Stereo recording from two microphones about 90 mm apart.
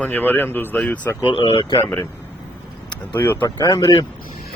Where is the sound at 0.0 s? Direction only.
20° left (ahead or behind).